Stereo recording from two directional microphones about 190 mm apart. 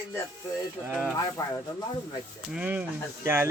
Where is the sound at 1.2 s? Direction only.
20° left (ahead or behind).